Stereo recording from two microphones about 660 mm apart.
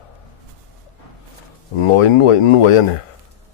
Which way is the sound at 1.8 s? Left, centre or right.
Left.